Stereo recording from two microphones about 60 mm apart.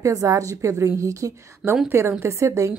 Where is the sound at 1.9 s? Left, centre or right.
Right.